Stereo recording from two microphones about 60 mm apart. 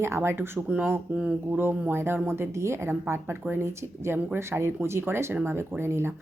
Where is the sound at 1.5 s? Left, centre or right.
Right.